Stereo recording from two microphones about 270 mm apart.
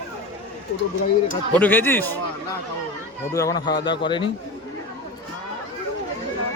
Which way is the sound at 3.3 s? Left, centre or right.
Centre.